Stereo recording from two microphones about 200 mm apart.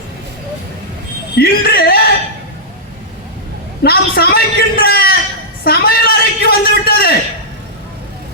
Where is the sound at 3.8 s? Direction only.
50° left (ahead or behind).